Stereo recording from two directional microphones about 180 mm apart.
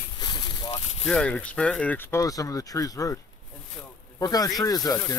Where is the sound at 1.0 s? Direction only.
5° left (ahead or behind); by 3.1 s 20° left (ahead or behind).